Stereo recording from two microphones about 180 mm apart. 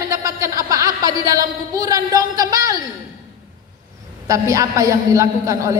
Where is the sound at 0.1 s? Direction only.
20° right (ahead or behind).